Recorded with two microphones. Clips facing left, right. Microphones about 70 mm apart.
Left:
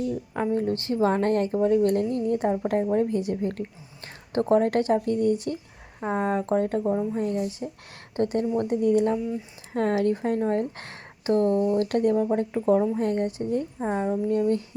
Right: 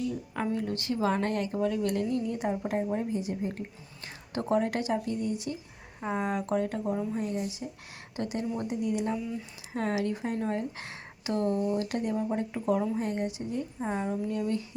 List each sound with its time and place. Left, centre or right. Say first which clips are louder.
0.5 s speech: left 8 dB; left
3.0 s a woman's voice: left 7 dB; left
4.3 s speech: left 7 dB; left
6.1 s speech: left 5 dB; left
6.8 s a woman's voice: left 5 dB; left
7.2 s speech: left 6 dB; left
8.1 s speech: left 8 dB; left
12.1 s speech: left 7 dB; left
13.0 s speech: left 6 dB; left
13.7 s a woman's voice: left 5 dB; left
14.3 s speech: left 7 dB; left